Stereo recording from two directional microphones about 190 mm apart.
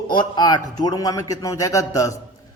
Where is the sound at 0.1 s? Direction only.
20° left (ahead or behind).